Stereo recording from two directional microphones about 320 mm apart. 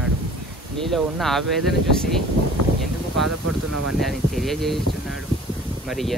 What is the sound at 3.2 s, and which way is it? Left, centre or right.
Speech, right.